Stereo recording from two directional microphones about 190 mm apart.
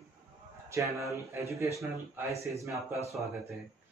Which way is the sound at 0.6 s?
15° right (ahead or behind).